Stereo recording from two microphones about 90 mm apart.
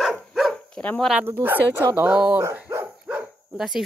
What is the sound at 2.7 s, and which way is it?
Dog, 30° right (ahead or behind).